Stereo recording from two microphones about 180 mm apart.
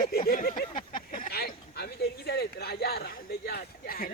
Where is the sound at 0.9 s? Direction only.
50° left (ahead or behind).